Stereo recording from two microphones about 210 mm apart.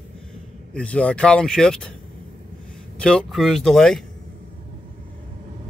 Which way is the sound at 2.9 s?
5° left (ahead or behind).